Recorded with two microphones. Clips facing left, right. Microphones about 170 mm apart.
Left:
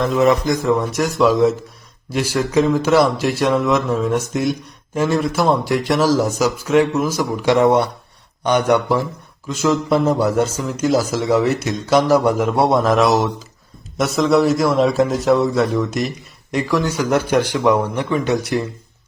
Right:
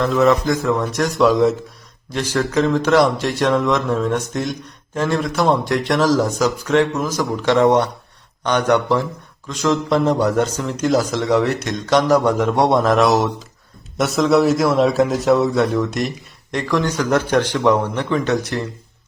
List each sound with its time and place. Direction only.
0.0 s speech: 15° left (ahead or behind)
0.9 s a man's voice: centre (ahead or behind)